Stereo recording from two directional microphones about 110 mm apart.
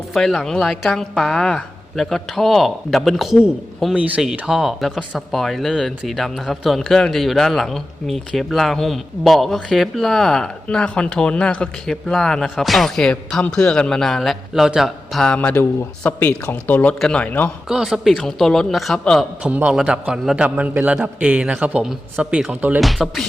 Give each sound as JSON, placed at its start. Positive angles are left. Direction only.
{"t": 0.1, "sound": "a man's voice", "side_deg": 0}
{"t": 15.4, "sound": "speech", "side_deg": 15}
{"t": 17.7, "sound": "a man's voice", "side_deg": -5}
{"t": 19.4, "sound": "a man's voice", "side_deg": -15}